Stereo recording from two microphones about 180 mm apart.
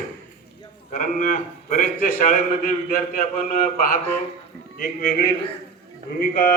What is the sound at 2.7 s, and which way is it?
A man's voice, 50° left (ahead or behind).